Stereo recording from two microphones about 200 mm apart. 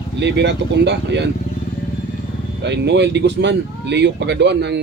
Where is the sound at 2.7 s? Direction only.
60° right (ahead or behind).